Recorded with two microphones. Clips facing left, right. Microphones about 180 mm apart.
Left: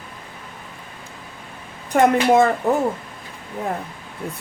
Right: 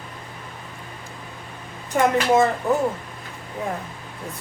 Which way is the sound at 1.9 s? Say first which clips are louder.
Left 3 dB; 60° left (ahead or behind).